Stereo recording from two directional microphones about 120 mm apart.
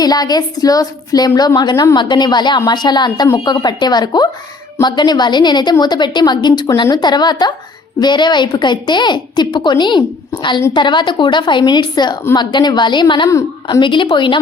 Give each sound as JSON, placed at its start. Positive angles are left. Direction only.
{"t": 0.0, "sound": "a woman's voice", "side_deg": 35}